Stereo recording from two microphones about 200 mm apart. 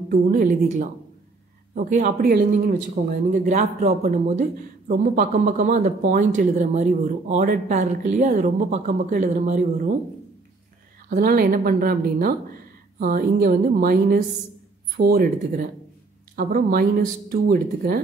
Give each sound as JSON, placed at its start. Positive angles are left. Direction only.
{"t": 0.1, "sound": "speech", "side_deg": -45}
{"t": 11.1, "sound": "speech", "side_deg": -45}